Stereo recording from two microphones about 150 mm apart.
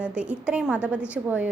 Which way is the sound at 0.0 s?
5° right (ahead or behind).